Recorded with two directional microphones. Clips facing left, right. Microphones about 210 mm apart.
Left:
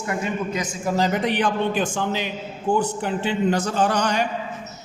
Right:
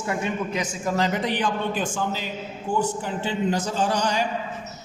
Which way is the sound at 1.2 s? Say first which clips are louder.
Left 3 dB; 65° left (ahead or behind).